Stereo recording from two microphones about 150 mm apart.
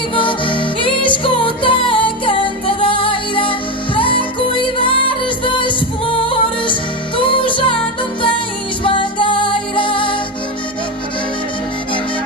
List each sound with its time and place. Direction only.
0.1 s music: 35° left (ahead or behind)